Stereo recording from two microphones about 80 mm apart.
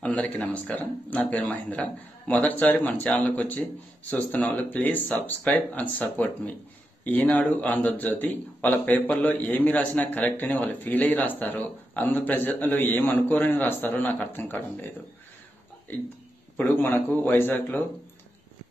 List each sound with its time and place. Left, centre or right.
0.0 s a man's voice: centre
16.5 s a man's voice: left